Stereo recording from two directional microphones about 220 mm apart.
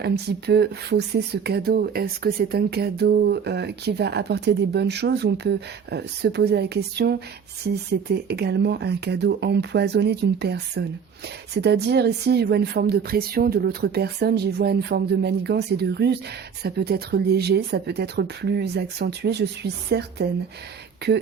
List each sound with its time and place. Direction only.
0.0 s speech: 50° right (ahead or behind)